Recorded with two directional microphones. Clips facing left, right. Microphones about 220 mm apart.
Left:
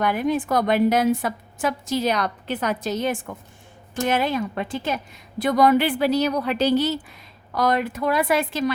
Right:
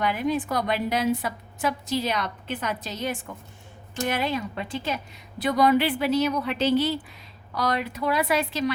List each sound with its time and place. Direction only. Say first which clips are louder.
0.0 s a woman's voice: left 3 dB; 50° left (ahead or behind)
4.2 s a woman's voice: left 4 dB; 50° left (ahead or behind)